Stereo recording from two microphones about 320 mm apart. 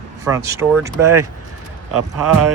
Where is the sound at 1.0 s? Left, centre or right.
Right.